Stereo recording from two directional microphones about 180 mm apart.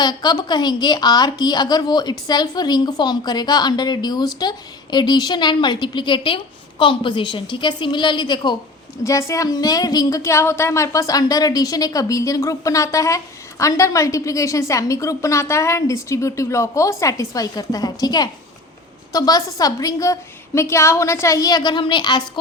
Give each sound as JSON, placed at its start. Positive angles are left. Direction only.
{"t": 0.0, "sound": "a woman's voice", "side_deg": 25}